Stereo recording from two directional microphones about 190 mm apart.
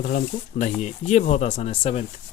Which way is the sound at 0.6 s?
40° left (ahead or behind).